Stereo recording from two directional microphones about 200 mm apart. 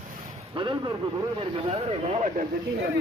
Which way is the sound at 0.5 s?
20° right (ahead or behind).